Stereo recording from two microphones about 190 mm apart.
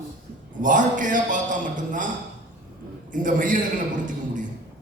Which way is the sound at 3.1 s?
45° right (ahead or behind).